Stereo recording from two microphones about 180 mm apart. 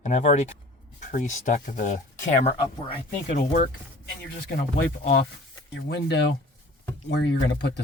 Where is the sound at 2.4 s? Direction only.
25° left (ahead or behind).